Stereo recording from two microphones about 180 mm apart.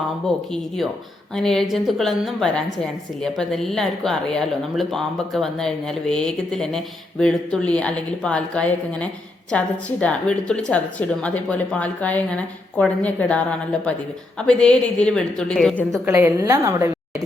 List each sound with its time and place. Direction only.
0.3 s a woman's voice: centre (ahead or behind)
15.9 s a woman's voice: 15° right (ahead or behind)